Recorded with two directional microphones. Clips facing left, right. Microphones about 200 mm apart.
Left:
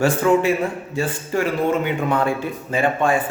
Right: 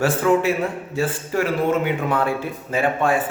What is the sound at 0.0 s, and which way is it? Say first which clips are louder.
A man's voice: left 1 dB; centre (ahead or behind).